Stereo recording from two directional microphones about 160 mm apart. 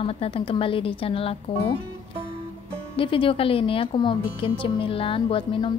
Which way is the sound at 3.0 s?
35° left (ahead or behind).